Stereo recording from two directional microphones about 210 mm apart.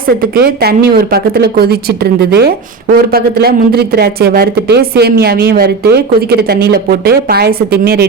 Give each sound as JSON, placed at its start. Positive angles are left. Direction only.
{"t": 0.3, "sound": "a woman's voice", "side_deg": -45}